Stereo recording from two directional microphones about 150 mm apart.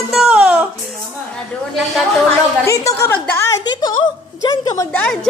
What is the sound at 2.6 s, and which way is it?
Speech, 20° left (ahead or behind).